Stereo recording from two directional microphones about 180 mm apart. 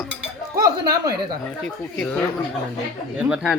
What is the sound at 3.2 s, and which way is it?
Speech, 5° right (ahead or behind).